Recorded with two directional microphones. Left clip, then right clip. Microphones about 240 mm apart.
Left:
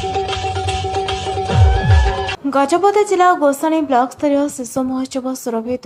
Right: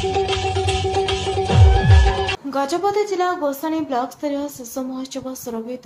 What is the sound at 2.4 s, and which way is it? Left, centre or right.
A woman's voice, left.